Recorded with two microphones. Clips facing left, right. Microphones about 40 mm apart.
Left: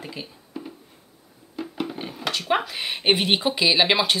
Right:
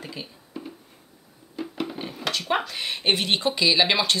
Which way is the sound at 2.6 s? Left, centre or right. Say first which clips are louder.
Left 2 dB; centre.